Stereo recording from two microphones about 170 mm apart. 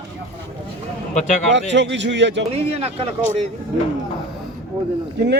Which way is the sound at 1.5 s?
90° right.